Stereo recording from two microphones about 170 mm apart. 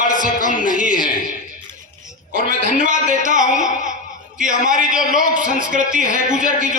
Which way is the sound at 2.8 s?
50° right (ahead or behind).